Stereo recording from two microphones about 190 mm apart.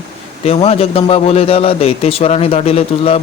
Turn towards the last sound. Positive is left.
turn(degrees=30)  # may be behind; listen again after turning